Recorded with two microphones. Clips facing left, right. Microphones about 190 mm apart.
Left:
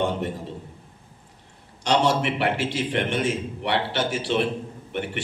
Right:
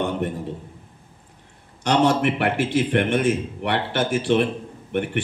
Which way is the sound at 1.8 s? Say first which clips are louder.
Right 3 dB; 55° right (ahead or behind).